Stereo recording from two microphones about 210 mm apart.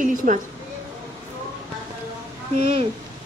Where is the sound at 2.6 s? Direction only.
25° right (ahead or behind).